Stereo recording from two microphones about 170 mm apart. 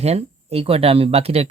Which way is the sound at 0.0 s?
40° right (ahead or behind).